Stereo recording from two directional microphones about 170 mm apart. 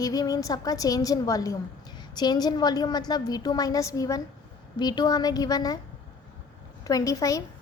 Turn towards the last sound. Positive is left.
turn(degrees=20)  # may be behind; listen again after turning